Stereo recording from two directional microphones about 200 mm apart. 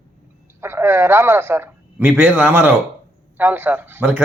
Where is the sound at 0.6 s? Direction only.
10° right (ahead or behind).